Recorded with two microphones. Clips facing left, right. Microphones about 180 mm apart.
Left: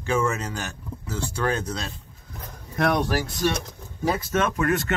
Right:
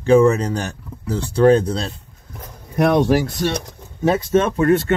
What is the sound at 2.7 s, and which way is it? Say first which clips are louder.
Speech: right 8 dB; 20° right (ahead or behind).